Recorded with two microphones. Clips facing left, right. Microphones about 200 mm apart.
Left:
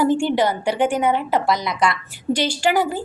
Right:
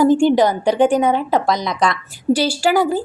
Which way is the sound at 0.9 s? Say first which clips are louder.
Right 4 dB; 40° right (ahead or behind).